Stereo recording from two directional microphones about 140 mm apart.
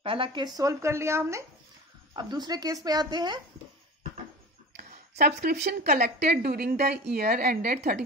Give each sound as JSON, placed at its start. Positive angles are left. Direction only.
{"t": 0.0, "sound": "speech", "side_deg": -40}
{"t": 0.6, "sound": "speech", "side_deg": -25}
{"t": 2.1, "sound": "speech", "side_deg": -30}
{"t": 5.2, "sound": "a woman's voice", "side_deg": -90}